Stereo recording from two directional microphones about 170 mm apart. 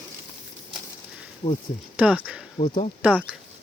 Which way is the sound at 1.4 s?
30° left (ahead or behind).